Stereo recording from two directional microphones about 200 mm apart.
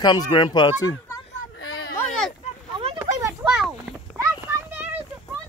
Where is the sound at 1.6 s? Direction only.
80° left.